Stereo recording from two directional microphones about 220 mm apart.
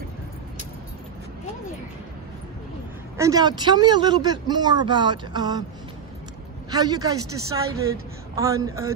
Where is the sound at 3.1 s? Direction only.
15° right (ahead or behind).